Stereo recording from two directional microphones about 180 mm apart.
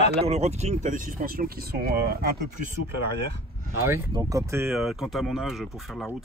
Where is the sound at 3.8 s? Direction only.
15° right (ahead or behind).